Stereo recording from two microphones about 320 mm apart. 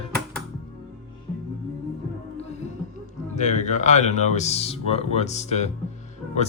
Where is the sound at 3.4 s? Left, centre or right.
Left.